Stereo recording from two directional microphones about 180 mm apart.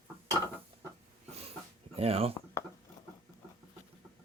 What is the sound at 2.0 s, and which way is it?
Speech, 35° right (ahead or behind).